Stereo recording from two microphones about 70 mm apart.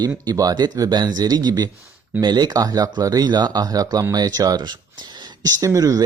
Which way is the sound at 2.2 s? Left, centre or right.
Right.